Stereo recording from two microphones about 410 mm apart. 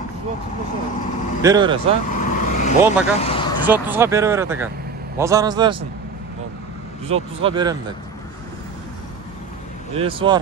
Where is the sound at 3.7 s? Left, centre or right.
Centre.